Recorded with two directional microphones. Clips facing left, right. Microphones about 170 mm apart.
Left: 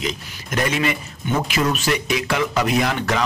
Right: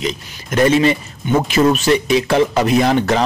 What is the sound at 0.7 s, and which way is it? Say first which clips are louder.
Speech: right 10 dB; 30° right (ahead or behind).